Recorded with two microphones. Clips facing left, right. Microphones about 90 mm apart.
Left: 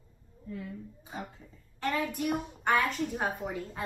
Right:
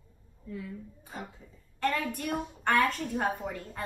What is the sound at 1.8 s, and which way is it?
A woman's voice, 15° left (ahead or behind).